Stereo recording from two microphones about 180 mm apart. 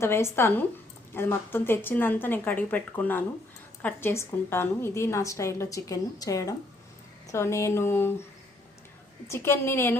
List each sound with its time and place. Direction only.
0.0 s a woman's voice: 15° left (ahead or behind)
9.2 s a woman's voice: 15° left (ahead or behind)